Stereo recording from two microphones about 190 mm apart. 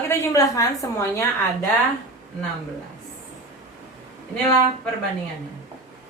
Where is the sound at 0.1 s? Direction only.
15° left (ahead or behind).